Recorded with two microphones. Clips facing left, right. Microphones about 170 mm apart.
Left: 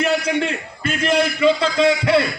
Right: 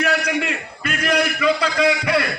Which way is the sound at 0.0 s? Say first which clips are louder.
Left 2 dB; 30° left (ahead or behind).